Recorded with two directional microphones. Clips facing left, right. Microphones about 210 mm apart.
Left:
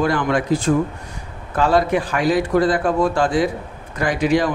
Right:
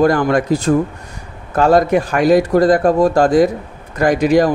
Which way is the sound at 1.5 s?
45° right (ahead or behind).